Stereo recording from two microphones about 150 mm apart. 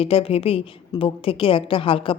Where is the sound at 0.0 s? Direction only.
40° left (ahead or behind).